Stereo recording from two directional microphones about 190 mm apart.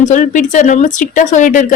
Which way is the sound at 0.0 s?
40° left (ahead or behind).